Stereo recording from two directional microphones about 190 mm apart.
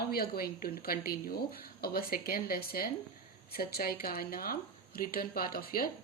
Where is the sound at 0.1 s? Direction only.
55° left (ahead or behind).